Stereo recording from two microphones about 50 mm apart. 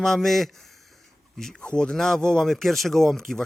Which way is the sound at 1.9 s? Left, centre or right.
Centre.